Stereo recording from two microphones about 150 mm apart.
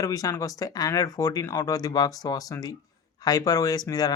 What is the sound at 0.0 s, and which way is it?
Speech, 25° left (ahead or behind).